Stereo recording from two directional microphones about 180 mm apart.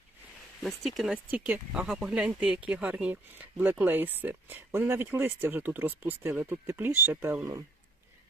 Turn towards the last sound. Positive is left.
turn(degrees=-15)  # may be behind; listen again after turning